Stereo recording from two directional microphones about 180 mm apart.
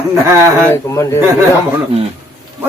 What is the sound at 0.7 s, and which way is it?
Speech, 15° left (ahead or behind).